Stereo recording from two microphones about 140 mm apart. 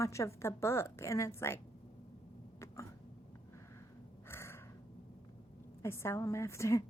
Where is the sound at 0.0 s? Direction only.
20° left (ahead or behind).